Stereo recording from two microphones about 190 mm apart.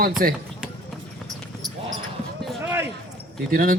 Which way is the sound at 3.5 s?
50° right (ahead or behind).